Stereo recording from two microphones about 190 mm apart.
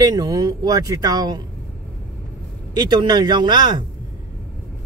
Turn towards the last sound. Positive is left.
turn(degrees=-25)  # may be behind; listen again after turning